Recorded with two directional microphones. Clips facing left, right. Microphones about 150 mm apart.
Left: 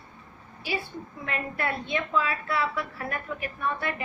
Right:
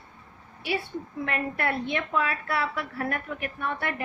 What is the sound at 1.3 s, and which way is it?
A woman's voice, 65° right (ahead or behind).